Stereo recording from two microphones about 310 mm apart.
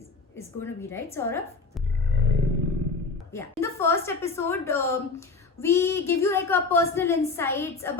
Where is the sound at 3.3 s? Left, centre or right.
Centre.